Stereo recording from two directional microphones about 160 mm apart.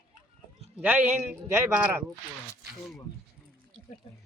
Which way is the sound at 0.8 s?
10° right (ahead or behind).